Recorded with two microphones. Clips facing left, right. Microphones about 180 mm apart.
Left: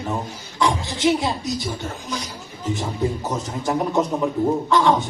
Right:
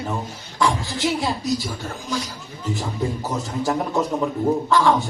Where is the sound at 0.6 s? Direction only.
20° left (ahead or behind).